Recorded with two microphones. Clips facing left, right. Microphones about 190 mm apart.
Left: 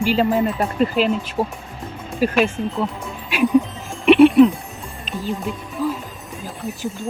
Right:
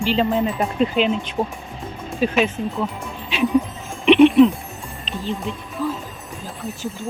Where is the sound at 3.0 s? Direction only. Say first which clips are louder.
Left 2 dB; centre (ahead or behind).